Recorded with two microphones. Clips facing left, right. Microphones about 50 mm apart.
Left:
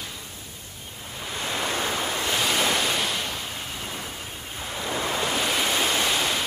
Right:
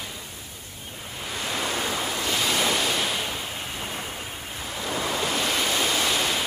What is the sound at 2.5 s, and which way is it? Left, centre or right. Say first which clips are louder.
Waves: even; centre.